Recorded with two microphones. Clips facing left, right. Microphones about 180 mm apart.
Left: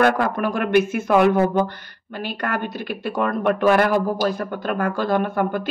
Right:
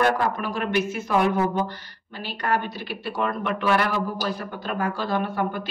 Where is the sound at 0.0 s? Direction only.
60° left (ahead or behind).